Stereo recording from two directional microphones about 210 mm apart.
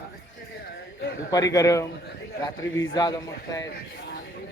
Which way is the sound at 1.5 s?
15° left (ahead or behind).